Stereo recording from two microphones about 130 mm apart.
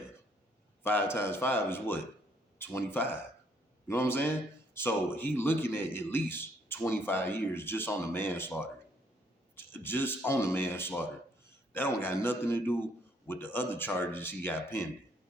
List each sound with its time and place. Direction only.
0.8 s speech: 15° left (ahead or behind)